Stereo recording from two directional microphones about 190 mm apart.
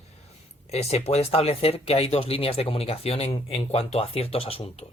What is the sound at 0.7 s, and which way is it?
Speech, 35° left (ahead or behind).